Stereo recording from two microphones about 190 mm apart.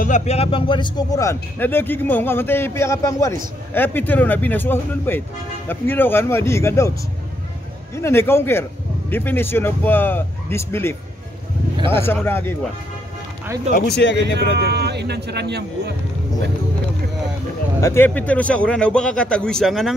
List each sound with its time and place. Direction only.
0.0 s speech: 40° left (ahead or behind); by 6.9 s 15° left (ahead or behind)
7.9 s speech: 15° left (ahead or behind)
13.7 s speech: 60° left (ahead or behind)
14.6 s speech: 60° right (ahead or behind)
17.7 s speech: 15° left (ahead or behind)